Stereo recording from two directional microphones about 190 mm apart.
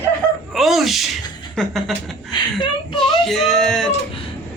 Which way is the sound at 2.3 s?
25° left (ahead or behind).